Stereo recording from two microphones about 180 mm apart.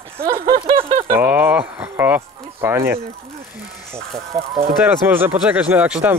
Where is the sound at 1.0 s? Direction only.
10° right (ahead or behind).